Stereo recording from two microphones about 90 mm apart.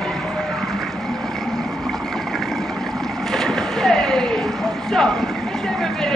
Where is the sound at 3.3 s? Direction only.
5° left (ahead or behind).